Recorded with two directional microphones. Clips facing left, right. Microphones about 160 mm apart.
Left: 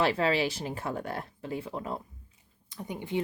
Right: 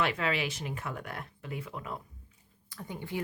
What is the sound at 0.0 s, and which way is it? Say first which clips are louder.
Speech: left 5 dB; 35° left (ahead or behind).